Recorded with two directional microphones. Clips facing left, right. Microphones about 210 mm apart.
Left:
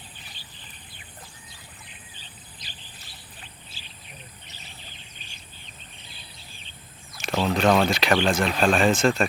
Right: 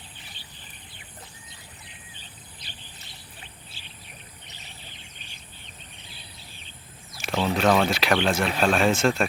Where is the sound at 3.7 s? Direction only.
60° right (ahead or behind).